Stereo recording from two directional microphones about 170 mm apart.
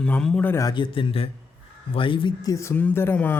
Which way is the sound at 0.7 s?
30° left (ahead or behind).